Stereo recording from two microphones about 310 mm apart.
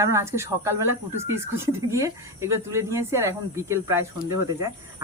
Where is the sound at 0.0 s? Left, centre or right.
Centre.